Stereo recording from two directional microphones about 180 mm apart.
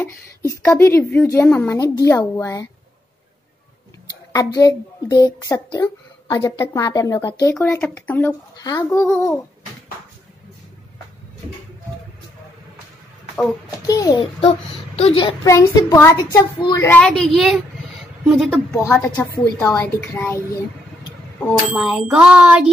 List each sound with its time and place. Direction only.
0.4 s a woman's voice: 15° left (ahead or behind)
4.3 s a woman's voice: 20° left (ahead or behind)
8.5 s a woman's voice: 20° left (ahead or behind)
13.8 s a woman's voice: 20° left (ahead or behind)
15.4 s a woman's voice: 15° left (ahead or behind)
16.9 s a woman's voice: 5° left (ahead or behind)
21.7 s a woman's voice: 5° right (ahead or behind)
22.1 s a sound: 5° right (ahead or behind)